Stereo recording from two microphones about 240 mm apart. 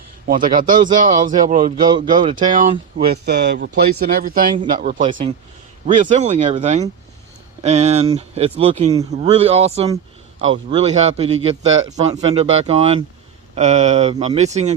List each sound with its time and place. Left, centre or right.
0.3 s a man's voice: right